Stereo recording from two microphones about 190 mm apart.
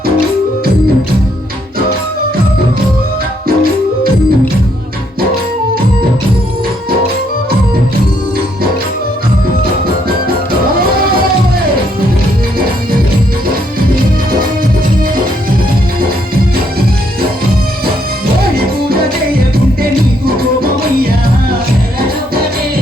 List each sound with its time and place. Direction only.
3.4 s music: 50° right (ahead or behind)
20.2 s music: 50° right (ahead or behind)